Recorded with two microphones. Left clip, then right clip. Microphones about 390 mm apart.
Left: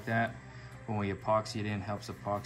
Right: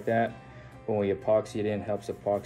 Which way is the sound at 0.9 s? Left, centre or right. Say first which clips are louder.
Right 6 dB; centre.